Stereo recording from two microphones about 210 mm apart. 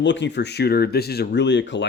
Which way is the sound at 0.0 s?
60° left (ahead or behind).